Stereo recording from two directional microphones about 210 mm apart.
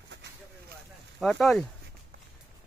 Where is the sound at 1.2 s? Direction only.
Centre (ahead or behind).